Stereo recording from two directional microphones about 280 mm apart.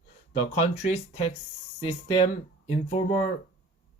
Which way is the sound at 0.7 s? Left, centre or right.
Left.